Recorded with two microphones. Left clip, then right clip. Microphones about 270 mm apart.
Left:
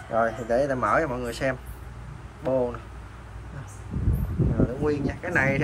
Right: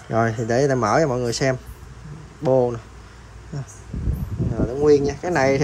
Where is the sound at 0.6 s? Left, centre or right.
Right.